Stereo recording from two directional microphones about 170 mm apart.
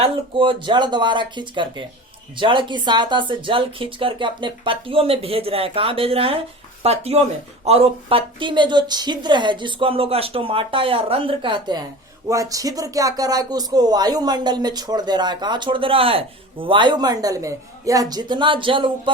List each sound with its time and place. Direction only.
0.0 s speech: 30° right (ahead or behind)